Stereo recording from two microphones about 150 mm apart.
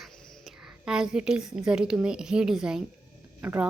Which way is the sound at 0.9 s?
5° right (ahead or behind).